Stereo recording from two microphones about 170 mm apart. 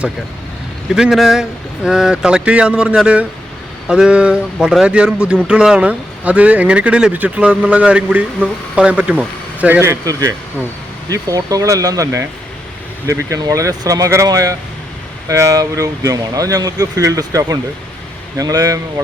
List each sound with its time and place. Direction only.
0.9 s a man's voice: centre (ahead or behind); by 19.0 s 20° right (ahead or behind)